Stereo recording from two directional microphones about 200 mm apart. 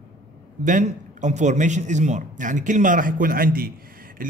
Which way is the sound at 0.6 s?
40° right (ahead or behind).